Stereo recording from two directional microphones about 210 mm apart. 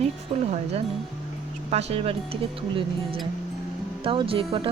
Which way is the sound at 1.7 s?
30° right (ahead or behind).